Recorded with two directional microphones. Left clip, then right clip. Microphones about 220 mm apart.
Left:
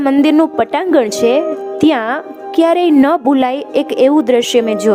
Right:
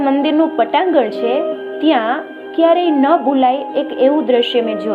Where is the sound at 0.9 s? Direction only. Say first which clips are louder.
Left 3 dB; 90° left.